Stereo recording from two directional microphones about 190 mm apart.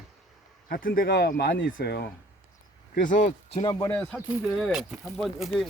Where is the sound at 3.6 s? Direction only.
20° left (ahead or behind).